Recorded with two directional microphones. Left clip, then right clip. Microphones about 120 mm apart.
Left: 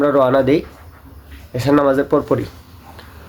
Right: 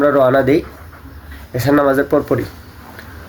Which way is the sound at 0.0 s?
15° left (ahead or behind).